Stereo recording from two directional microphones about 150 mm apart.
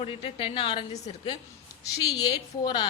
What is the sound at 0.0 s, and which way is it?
A woman's voice, 40° left (ahead or behind).